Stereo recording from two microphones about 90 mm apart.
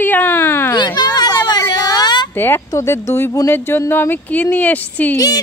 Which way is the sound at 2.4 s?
25° left (ahead or behind).